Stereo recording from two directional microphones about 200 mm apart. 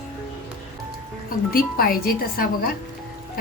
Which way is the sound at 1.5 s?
45° left (ahead or behind).